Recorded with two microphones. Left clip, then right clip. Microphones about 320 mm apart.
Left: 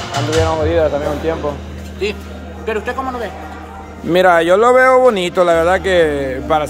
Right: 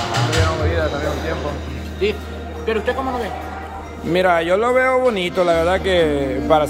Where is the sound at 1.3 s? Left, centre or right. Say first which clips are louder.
Left 5 dB; centre.